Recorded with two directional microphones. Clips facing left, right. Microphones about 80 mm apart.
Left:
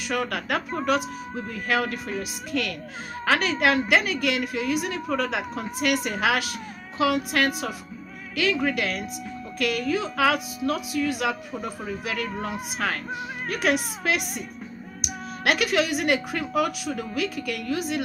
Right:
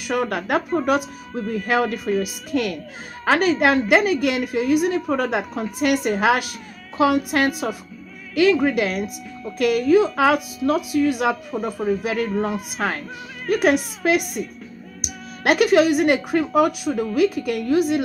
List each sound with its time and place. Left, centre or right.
0.1 s a woman's voice: right
14.2 s a woman's voice: left
15.4 s a woman's voice: right